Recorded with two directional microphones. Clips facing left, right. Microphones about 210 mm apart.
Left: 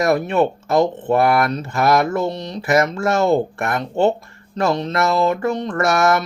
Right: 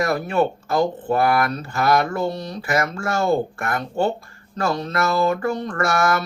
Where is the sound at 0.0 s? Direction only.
25° left (ahead or behind).